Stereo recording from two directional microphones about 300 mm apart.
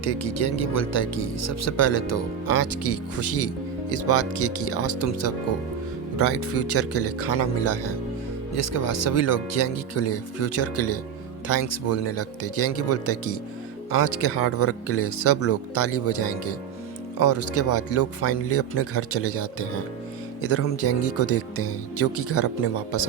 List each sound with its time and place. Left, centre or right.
0.0 s speech: left